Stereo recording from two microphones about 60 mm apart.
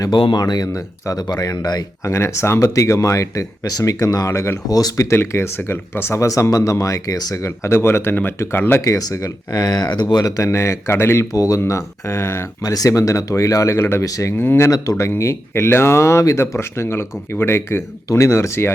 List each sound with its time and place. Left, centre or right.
0.6 s speech: left
2.0 s speech: left
5.1 s speech: left
6.2 s speech: left
7.6 s speech: left
8.8 s speech: left
10.5 s speech: left
11.3 s speech: left
11.6 s speech: left
12.6 s speech: left
14.3 s speech: left